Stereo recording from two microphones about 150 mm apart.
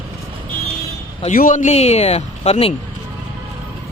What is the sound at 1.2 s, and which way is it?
Speech, 60° left (ahead or behind).